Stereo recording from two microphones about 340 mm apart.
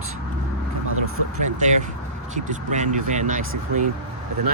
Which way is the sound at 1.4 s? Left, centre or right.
Right.